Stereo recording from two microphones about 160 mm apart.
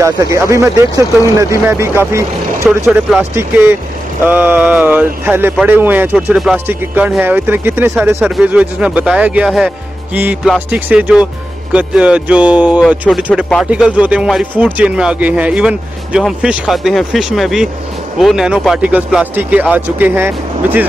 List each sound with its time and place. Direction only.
0.0 s speech: 20° right (ahead or behind)